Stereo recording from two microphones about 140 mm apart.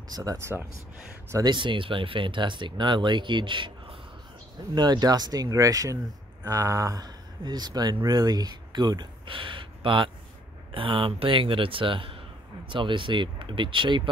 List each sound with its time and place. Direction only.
0.1 s speech: 25° right (ahead or behind)
1.3 s speech: 30° right (ahead or behind)